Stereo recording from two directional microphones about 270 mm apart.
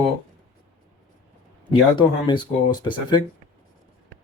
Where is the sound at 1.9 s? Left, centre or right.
Centre.